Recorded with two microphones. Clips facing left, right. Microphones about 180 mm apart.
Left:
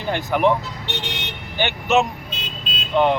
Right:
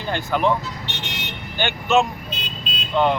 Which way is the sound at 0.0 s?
15° left (ahead or behind).